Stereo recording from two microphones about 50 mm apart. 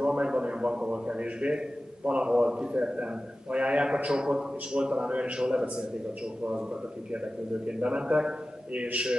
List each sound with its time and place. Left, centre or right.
0.0 s a man's voice: centre